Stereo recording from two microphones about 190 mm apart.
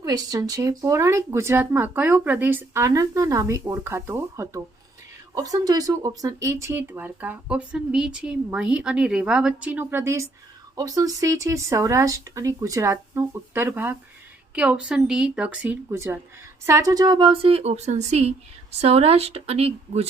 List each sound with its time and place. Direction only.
0.0 s a woman's voice: 20° right (ahead or behind)